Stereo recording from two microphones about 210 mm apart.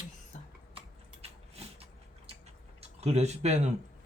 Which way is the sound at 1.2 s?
30° right (ahead or behind).